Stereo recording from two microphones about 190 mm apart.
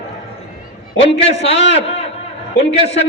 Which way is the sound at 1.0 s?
30° left (ahead or behind).